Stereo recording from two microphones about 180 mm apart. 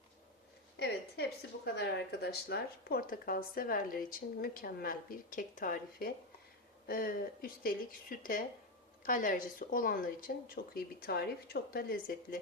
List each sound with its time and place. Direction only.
0.8 s a woman's voice: 70° left (ahead or behind)